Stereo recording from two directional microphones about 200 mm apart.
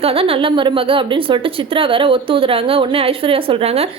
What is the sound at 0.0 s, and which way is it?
Speech, 30° right (ahead or behind).